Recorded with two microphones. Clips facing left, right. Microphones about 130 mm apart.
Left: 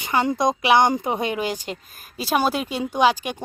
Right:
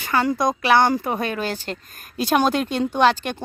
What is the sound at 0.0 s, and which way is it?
Speech, 20° left (ahead or behind).